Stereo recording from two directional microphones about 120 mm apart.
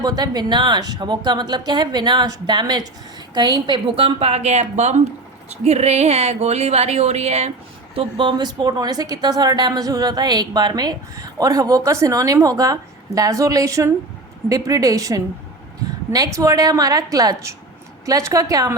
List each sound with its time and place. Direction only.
0.0 s a woman's voice: 35° right (ahead or behind); by 7.5 s 65° right (ahead or behind)
7.9 s a woman's voice: 40° right (ahead or behind)